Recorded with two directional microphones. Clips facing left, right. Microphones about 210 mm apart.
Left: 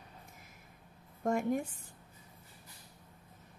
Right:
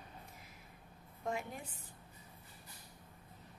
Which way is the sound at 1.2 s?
45° left (ahead or behind).